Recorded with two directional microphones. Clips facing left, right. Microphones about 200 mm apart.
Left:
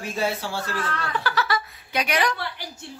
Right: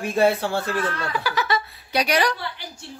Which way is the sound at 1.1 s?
15° right (ahead or behind).